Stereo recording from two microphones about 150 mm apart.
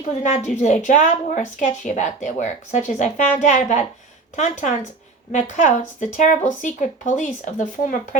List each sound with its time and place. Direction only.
0.0 s a woman's voice: 55° left (ahead or behind)